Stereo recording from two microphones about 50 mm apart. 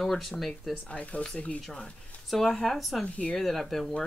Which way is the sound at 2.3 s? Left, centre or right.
Centre.